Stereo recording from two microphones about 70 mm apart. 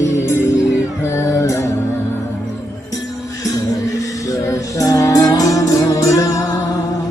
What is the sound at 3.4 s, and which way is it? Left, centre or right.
Music, left.